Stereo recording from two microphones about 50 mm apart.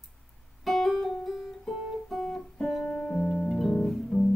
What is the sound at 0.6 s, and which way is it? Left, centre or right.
Music, centre.